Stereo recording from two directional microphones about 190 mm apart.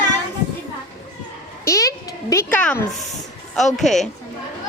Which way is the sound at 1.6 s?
15° left (ahead or behind).